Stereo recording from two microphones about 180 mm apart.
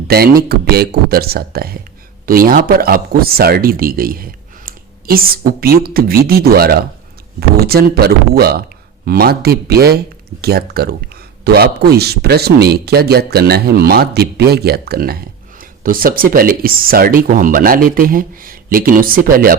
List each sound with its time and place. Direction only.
0.1 s speech: 60° right (ahead or behind)